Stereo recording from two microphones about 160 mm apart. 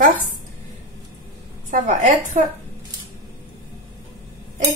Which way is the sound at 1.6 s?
55° right (ahead or behind).